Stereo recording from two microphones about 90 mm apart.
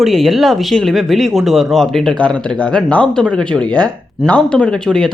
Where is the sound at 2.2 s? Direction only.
15° left (ahead or behind).